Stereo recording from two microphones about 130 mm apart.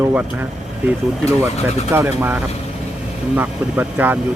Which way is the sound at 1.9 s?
15° right (ahead or behind).